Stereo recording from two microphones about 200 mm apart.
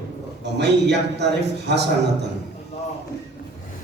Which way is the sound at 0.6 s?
55° right (ahead or behind).